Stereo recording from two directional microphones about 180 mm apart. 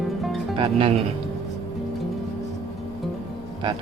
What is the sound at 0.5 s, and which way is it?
Speech, 30° right (ahead or behind).